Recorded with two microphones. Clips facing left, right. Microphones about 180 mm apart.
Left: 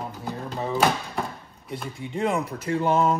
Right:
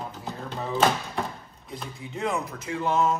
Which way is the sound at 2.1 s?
30° left (ahead or behind).